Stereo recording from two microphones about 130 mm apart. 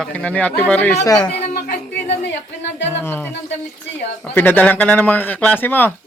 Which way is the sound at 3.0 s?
15° left (ahead or behind).